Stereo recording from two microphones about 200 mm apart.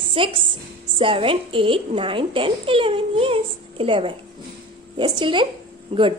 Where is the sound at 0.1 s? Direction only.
25° right (ahead or behind).